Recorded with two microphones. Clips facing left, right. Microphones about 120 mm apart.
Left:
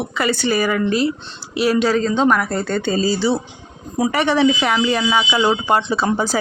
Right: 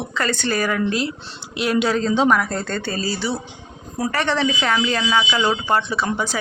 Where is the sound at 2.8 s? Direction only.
20° left (ahead or behind).